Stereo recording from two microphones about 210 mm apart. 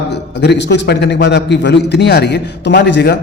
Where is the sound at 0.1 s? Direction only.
55° left (ahead or behind).